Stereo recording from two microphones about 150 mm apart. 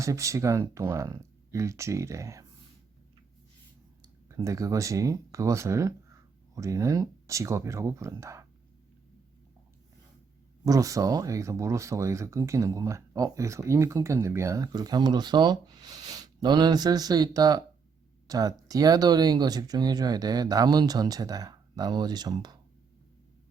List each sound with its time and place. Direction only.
0.0 s speech: 20° right (ahead or behind)
4.3 s speech: 20° right (ahead or behind)
10.7 s speech: 20° right (ahead or behind)